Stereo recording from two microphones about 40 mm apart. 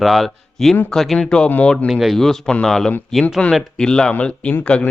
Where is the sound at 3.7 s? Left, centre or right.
Centre.